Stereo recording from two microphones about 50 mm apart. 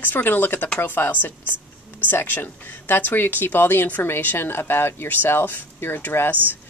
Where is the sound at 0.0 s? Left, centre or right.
Left.